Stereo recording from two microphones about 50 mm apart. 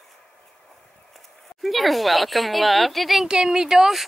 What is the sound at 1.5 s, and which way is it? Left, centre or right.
A woman's voice, centre.